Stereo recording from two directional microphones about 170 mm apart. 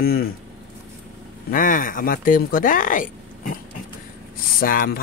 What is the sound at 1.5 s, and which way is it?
Speech, 55° left (ahead or behind).